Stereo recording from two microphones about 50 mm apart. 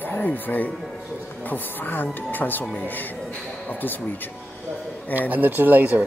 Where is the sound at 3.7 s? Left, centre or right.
Left.